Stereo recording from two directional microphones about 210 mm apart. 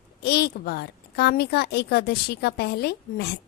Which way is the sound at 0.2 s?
50° left (ahead or behind).